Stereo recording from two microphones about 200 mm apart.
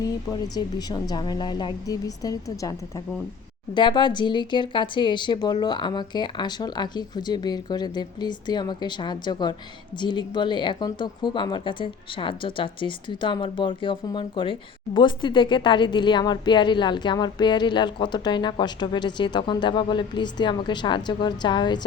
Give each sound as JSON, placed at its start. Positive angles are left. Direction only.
{"t": 0.0, "sound": "speech", "side_deg": 20}
{"t": 3.8, "sound": "speech", "side_deg": 20}